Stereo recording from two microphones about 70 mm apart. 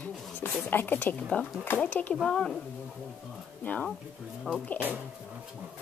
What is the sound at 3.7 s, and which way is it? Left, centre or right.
Speech, left.